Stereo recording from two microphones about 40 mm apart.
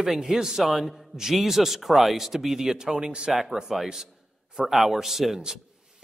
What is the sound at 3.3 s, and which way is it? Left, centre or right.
A man's voice, centre.